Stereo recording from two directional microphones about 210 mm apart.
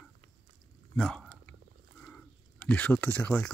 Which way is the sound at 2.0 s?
5° left (ahead or behind).